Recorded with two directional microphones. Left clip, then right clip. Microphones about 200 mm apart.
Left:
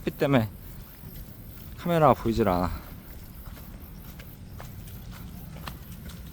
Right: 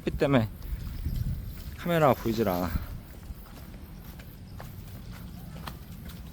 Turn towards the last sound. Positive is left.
turn(degrees=0)  # may be behind; listen again after turning